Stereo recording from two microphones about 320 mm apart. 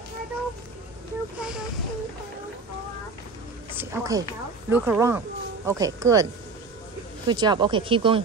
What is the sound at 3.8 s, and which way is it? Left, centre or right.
Speech, centre.